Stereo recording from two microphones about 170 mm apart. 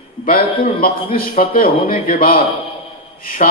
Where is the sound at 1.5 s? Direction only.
55° left (ahead or behind).